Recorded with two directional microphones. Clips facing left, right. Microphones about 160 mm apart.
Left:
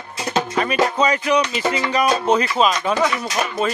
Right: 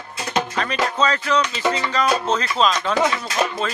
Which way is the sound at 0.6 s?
10° left (ahead or behind).